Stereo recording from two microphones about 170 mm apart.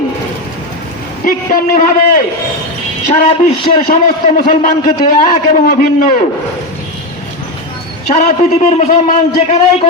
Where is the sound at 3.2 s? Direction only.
30° left (ahead or behind).